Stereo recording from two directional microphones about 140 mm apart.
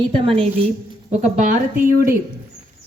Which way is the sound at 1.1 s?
60° right (ahead or behind).